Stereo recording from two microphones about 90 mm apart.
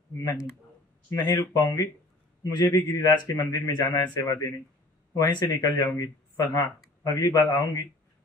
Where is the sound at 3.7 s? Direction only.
50° left (ahead or behind).